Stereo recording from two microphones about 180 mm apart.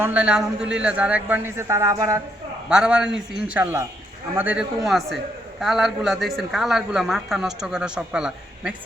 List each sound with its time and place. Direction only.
0.0 s a man's voice: 5° right (ahead or behind)
2.6 s a man's voice: 5° right (ahead or behind)